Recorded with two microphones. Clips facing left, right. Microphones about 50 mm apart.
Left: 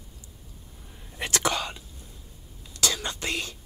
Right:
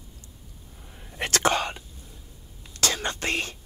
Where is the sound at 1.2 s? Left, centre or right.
Right.